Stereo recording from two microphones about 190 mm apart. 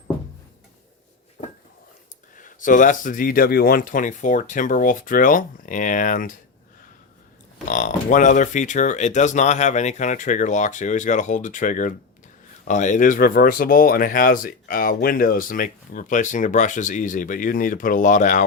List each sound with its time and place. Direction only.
2.4 s speech: 45° left (ahead or behind)
7.6 s speech: 40° left (ahead or behind)